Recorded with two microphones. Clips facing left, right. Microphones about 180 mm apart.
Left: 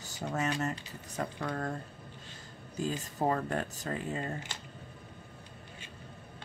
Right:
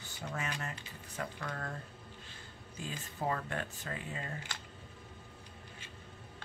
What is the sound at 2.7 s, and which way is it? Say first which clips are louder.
Speech: left 9 dB; 40° left (ahead or behind).